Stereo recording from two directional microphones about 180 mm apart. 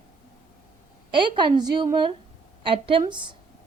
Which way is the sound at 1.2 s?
25° right (ahead or behind).